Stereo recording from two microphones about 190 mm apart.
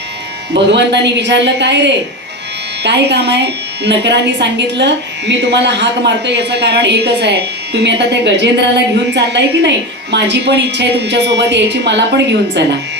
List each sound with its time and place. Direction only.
0.5 s speech: 65° right (ahead or behind)